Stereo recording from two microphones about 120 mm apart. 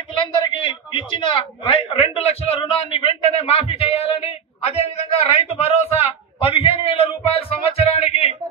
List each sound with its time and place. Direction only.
0.2 s a man's voice: 45° left (ahead or behind)